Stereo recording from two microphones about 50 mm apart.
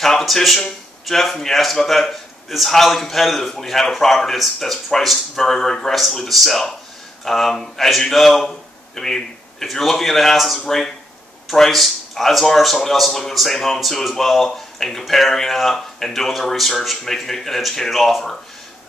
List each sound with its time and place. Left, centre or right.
0.0 s speech: centre